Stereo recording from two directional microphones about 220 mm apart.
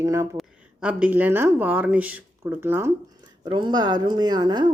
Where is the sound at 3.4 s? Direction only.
20° right (ahead or behind).